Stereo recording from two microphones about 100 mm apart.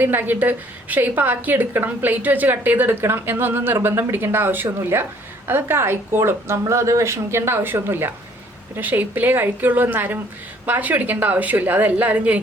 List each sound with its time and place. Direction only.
0.0 s a woman's voice: 20° right (ahead or behind)